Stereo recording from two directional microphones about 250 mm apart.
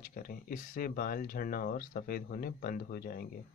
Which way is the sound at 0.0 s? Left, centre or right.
Left.